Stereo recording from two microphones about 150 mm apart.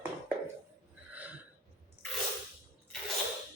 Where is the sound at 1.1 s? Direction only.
10° right (ahead or behind).